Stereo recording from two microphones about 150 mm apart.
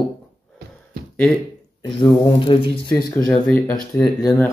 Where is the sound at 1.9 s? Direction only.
30° left (ahead or behind).